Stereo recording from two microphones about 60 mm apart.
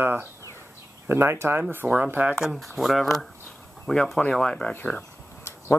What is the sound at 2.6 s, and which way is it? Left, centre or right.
Speech, centre.